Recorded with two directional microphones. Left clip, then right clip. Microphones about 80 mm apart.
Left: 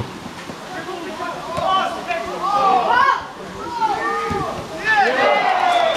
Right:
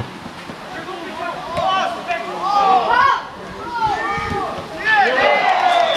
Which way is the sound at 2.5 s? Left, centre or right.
Centre.